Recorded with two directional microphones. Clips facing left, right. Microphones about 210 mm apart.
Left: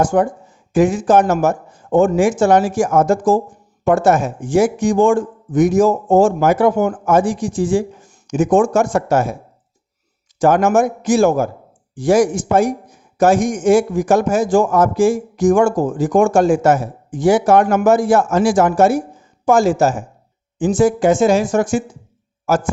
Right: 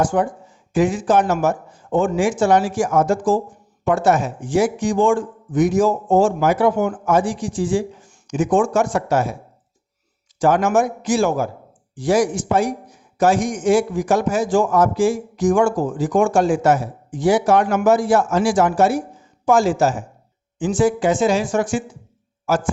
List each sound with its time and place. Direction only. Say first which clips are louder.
0.0 s a man's voice: left 4 dB; 45° left (ahead or behind)
10.4 s a man's voice: left 3 dB; 45° left (ahead or behind)